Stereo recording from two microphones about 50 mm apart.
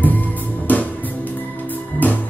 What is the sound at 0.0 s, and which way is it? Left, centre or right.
Music, left.